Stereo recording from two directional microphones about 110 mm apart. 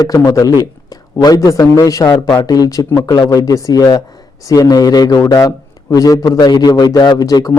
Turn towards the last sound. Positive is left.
turn(degrees=35)  # may be behind; listen again after turning